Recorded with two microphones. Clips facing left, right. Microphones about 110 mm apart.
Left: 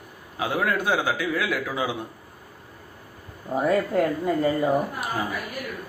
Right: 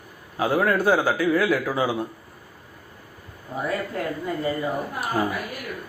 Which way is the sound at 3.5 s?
35° left (ahead or behind).